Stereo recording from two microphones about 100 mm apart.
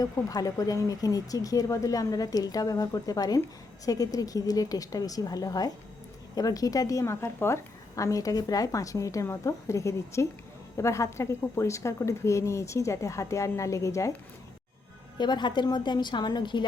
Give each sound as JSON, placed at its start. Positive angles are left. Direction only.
{"t": 0.0, "sound": "a woman's voice", "side_deg": 35}
{"t": 15.2, "sound": "a woman's voice", "side_deg": 50}